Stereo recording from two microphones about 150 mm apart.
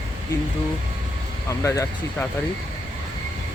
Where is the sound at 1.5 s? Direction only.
20° left (ahead or behind).